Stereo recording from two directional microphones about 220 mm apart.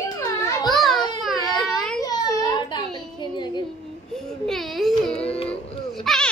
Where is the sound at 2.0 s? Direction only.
15° left (ahead or behind).